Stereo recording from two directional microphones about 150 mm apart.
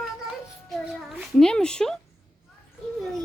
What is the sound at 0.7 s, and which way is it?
A child's voice, 5° right (ahead or behind).